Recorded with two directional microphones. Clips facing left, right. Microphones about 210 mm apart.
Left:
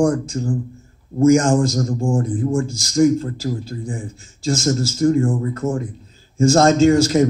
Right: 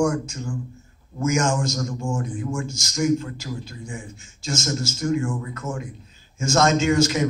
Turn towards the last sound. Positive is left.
turn(degrees=35)  # may be behind; listen again after turning